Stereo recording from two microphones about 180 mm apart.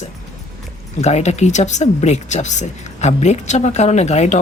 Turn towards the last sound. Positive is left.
turn(degrees=40)  # may be behind; listen again after turning